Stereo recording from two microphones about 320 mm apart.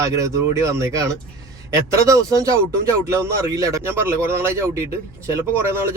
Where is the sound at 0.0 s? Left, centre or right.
Centre.